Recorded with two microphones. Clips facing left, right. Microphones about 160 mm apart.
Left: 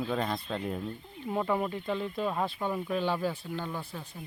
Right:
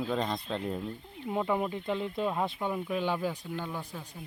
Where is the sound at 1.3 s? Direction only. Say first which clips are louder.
Even; 10° right (ahead or behind).